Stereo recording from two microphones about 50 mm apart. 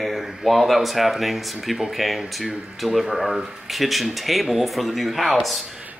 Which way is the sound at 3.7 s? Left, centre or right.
Centre.